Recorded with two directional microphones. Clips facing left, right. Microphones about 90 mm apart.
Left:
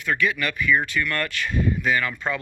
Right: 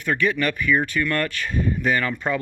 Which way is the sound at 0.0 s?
40° right (ahead or behind).